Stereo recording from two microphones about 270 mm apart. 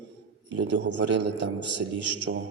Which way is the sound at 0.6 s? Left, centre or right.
Right.